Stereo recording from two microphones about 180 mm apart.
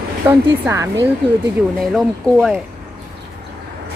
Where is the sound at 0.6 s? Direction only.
15° right (ahead or behind).